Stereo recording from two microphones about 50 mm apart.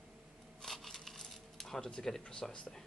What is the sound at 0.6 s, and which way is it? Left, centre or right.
Coin, centre.